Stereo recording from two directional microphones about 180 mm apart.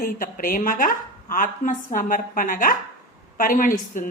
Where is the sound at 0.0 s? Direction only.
50° left (ahead or behind).